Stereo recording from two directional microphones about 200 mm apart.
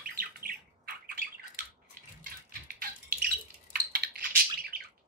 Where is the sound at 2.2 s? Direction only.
50° right (ahead or behind).